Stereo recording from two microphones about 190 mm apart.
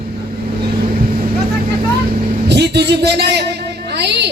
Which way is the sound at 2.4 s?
60° right (ahead or behind).